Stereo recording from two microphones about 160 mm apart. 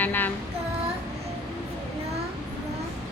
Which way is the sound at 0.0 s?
10° left (ahead or behind).